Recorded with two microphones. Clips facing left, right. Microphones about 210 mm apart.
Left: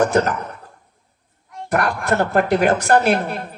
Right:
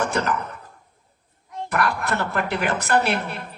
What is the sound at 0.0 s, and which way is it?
Speech, 40° left (ahead or behind).